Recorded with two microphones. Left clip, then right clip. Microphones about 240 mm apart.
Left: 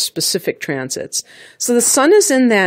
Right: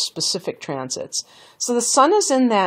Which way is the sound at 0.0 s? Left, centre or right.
Left.